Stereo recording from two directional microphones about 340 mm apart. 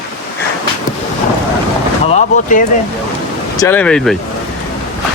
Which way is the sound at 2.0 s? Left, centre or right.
Centre.